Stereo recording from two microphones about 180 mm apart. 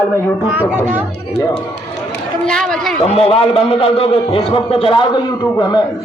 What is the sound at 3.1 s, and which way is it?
A man's voice, 30° left (ahead or behind).